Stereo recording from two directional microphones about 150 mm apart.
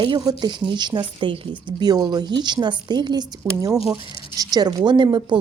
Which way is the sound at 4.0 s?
35° left (ahead or behind).